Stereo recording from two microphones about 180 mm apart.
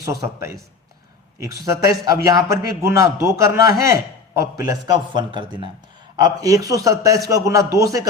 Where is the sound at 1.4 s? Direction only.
20° right (ahead or behind).